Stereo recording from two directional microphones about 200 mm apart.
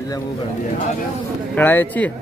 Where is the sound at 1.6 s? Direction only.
10° left (ahead or behind).